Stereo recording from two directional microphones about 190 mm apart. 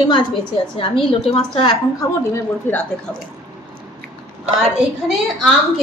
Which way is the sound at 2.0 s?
15° left (ahead or behind).